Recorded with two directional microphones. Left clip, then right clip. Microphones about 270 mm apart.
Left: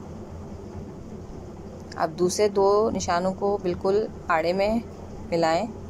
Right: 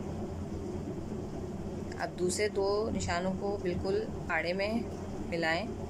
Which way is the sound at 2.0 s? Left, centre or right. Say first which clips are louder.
Left 10 dB; centre.